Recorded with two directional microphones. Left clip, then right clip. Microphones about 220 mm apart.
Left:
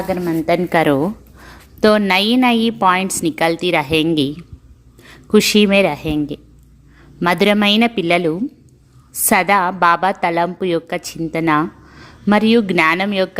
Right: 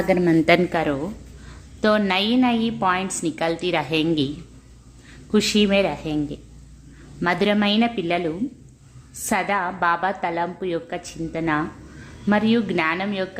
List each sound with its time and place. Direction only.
0.1 s a woman's voice: 15° right (ahead or behind)
0.7 s a woman's voice: 40° left (ahead or behind)
1.8 s a woman's voice: 30° left (ahead or behind)